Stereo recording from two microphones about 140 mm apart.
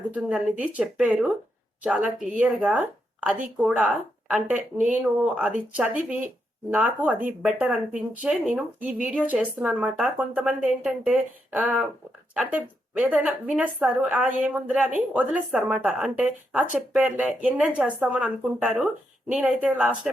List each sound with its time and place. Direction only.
0.1 s speech: 10° right (ahead or behind)